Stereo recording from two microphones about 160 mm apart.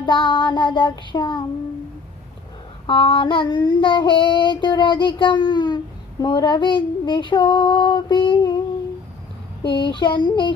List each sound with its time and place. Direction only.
0.0 s child singing: 30° left (ahead or behind)
2.9 s child singing: 30° left (ahead or behind)
9.7 s child singing: 30° left (ahead or behind)